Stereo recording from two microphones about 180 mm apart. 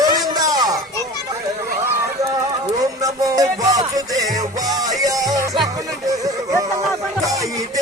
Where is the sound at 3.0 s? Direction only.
20° right (ahead or behind).